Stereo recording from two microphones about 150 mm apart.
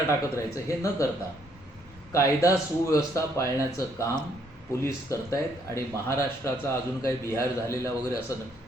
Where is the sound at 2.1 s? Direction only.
20° left (ahead or behind).